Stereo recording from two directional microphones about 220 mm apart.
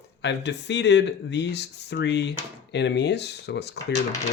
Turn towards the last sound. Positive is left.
turn(degrees=50)  # may be behind; listen again after turning